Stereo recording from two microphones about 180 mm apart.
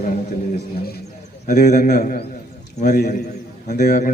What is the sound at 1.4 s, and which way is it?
A man's voice, 45° left (ahead or behind).